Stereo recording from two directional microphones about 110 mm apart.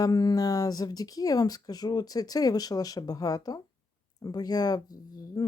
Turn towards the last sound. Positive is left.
turn(degrees=35)  # may be behind; listen again after turning